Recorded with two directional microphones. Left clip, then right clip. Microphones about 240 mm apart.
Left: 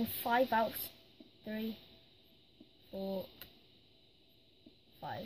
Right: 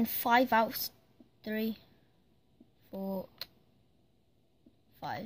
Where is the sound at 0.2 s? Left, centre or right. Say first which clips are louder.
Right 5 dB; right.